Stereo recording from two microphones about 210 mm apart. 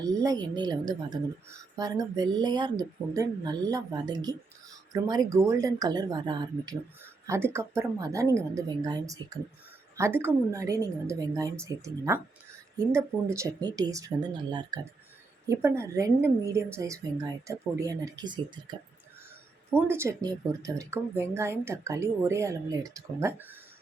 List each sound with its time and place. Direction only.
0.0 s a woman's voice: 15° right (ahead or behind)